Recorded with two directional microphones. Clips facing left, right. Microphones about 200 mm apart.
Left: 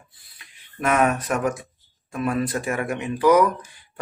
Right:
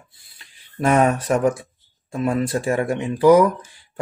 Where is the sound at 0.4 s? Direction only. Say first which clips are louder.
Right 5 dB; 30° right (ahead or behind).